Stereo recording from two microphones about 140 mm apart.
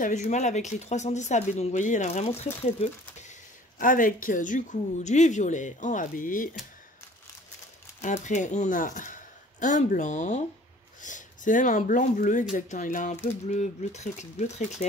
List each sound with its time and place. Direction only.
0.0 s speech: 60° left (ahead or behind)
8.0 s speech: 60° left (ahead or behind)